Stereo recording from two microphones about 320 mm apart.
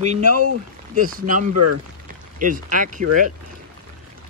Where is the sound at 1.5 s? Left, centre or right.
Right.